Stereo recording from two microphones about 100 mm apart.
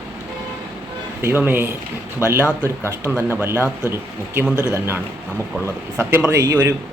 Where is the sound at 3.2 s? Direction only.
25° right (ahead or behind).